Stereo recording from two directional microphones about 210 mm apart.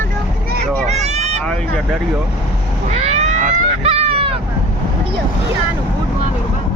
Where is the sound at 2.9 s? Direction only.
30° right (ahead or behind).